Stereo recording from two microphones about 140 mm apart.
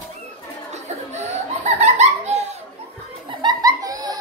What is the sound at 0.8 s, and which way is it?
Laughter, 55° right (ahead or behind).